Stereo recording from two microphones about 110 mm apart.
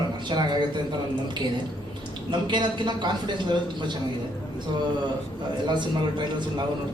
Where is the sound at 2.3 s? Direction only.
45° right (ahead or behind).